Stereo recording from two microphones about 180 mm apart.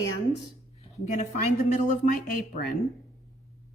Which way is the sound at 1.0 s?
40° left (ahead or behind).